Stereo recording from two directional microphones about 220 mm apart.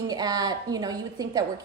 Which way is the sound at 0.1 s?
15° right (ahead or behind).